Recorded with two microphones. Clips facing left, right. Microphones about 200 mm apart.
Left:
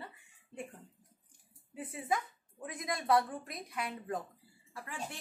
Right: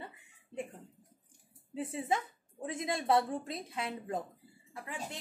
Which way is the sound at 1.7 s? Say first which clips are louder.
Right 2 dB; 25° right (ahead or behind).